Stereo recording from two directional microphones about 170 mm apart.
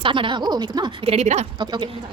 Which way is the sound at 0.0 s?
30° right (ahead or behind).